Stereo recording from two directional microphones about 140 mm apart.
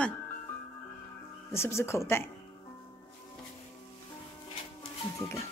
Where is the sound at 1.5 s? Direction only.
20° left (ahead or behind).